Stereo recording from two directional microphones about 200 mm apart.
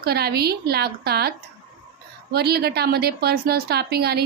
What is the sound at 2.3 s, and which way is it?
A woman's voice, 55° right (ahead or behind).